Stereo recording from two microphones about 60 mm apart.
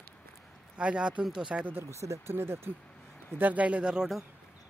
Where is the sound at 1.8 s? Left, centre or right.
Right.